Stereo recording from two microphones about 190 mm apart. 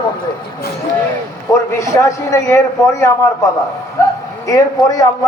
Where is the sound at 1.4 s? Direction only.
15° left (ahead or behind).